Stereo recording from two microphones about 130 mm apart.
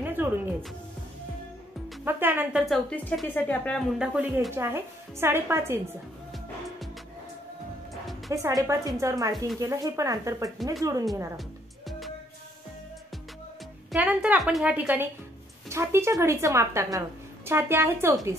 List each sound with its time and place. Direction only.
0.0 s music: 15° right (ahead or behind)
2.0 s a woman's voice: 15° right (ahead or behind)
2.5 s a woman's voice: centre (ahead or behind)
3.3 s speech: 10° left (ahead or behind)
4.0 s a woman's voice: 10° right (ahead or behind)
8.3 s speech: 25° right (ahead or behind)
13.9 s a woman's voice: 10° right (ahead or behind)